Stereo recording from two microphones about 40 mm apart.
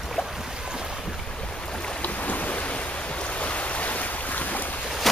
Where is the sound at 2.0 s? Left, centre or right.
Left.